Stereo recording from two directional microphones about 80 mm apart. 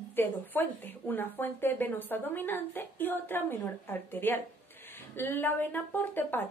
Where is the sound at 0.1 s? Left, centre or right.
Left.